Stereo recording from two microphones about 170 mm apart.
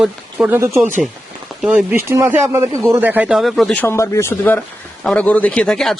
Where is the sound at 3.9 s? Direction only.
15° left (ahead or behind).